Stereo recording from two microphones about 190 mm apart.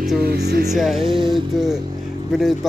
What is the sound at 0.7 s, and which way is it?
Speech, centre (ahead or behind).